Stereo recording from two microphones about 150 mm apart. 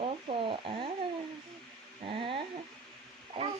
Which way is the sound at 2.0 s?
35° right (ahead or behind).